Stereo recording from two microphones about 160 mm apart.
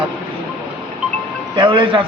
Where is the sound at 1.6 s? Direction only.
35° right (ahead or behind).